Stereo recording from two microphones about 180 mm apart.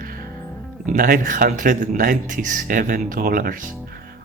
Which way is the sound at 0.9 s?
50° right (ahead or behind).